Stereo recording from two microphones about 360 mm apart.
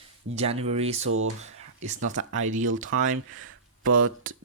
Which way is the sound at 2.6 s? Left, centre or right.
Right.